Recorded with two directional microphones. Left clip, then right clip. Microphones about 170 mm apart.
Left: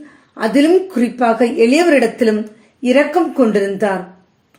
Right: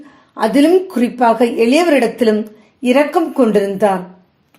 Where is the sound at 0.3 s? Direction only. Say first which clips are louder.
Right 1 dB; 25° right (ahead or behind).